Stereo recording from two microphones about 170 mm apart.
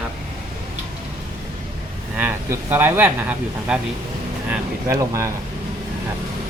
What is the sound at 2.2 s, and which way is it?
Speech, 10° right (ahead or behind).